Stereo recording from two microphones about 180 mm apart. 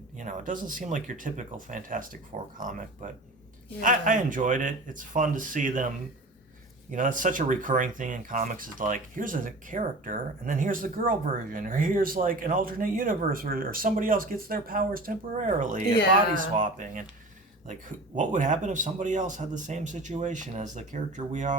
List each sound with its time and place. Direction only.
0.2 s speech: 45° right (ahead or behind)
6.9 s speech: 45° right (ahead or behind)